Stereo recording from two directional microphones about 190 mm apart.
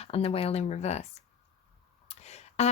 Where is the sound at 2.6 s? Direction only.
35° left (ahead or behind).